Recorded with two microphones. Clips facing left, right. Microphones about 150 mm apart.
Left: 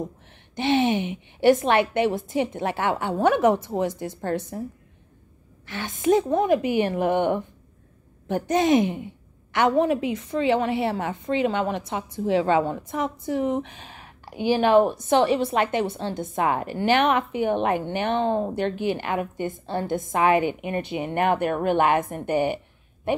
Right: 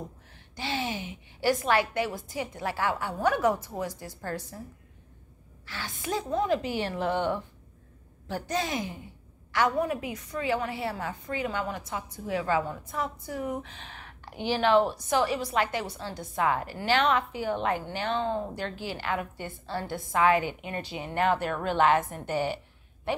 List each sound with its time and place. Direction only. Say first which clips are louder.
0.0 s a woman's voice: left 9 dB; 20° left (ahead or behind)
5.7 s a woman's voice: left 12 dB; 20° left (ahead or behind)
21.1 s speech: left 4 dB; 55° left (ahead or behind)
21.6 s a woman's voice: left 2 dB; 15° left (ahead or behind)